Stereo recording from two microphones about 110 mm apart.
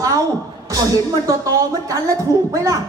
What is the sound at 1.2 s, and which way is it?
A woman's voice, 35° right (ahead or behind).